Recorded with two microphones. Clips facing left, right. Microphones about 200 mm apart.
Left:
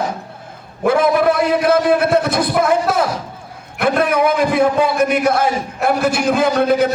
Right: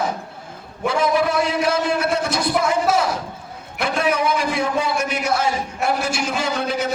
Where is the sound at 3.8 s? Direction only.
55° left (ahead or behind).